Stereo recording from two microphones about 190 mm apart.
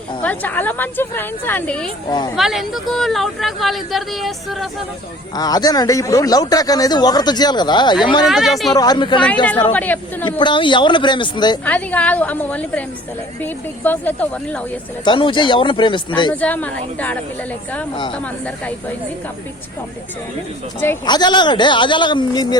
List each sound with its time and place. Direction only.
0.2 s a woman's voice: 10° left (ahead or behind)
2.0 s a man's voice: 20° left (ahead or behind)
2.3 s speech: centre (ahead or behind)
5.4 s a man's voice: 20° left (ahead or behind)
8.3 s speech: centre (ahead or behind)
8.7 s a man's voice: 20° left (ahead or behind)
9.2 s a woman's voice: 5° left (ahead or behind)
10.2 s a man's voice: 25° left (ahead or behind)
11.6 s a woman's voice: 10° left (ahead or behind)
15.0 s a man's voice: 25° left (ahead or behind)
16.3 s a woman's voice: 10° left (ahead or behind)
21.1 s a man's voice: 25° left (ahead or behind)